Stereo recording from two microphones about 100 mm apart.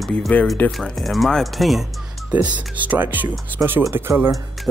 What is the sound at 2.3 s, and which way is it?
Speech, 15° right (ahead or behind).